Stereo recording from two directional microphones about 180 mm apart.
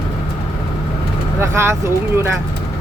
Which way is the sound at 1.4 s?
15° right (ahead or behind).